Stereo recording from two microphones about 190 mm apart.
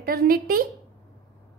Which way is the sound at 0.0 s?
50° right (ahead or behind).